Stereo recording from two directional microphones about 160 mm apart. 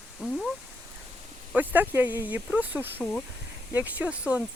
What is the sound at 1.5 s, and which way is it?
Speech, 10° right (ahead or behind).